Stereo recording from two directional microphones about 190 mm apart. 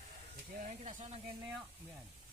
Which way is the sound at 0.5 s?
35° right (ahead or behind).